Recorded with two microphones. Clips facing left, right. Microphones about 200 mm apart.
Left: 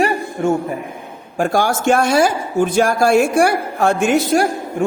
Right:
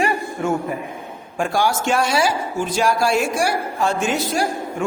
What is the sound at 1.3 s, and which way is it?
Speech, 45° left (ahead or behind).